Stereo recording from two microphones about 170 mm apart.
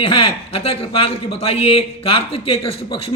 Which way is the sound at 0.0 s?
30° left (ahead or behind).